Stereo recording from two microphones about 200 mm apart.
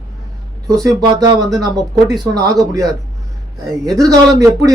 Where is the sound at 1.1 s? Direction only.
20° right (ahead or behind).